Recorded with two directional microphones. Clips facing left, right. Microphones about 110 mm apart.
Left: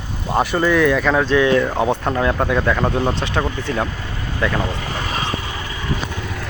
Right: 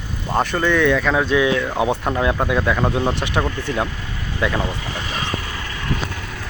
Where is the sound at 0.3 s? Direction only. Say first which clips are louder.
Left 2 dB; 5° left (ahead or behind).